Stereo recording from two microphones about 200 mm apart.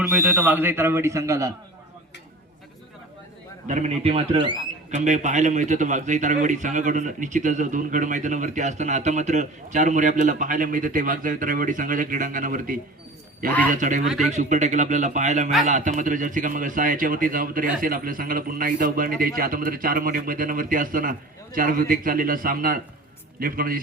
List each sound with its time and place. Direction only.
0.0 s a man's voice: 10° right (ahead or behind)
3.7 s a man's voice: 35° right (ahead or behind)
4.9 s a man's voice: 40° right (ahead or behind)